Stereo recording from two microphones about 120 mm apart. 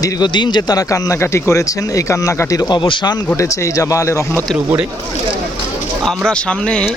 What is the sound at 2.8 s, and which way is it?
Speech, 40° left (ahead or behind).